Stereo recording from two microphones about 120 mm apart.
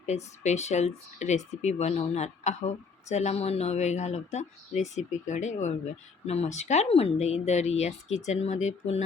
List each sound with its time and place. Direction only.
0.0 s a woman's voice: 70° left (ahead or behind)